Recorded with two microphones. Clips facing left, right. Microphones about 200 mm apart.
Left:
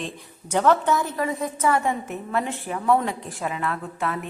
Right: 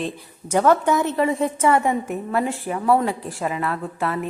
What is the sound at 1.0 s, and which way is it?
Speech, 25° right (ahead or behind).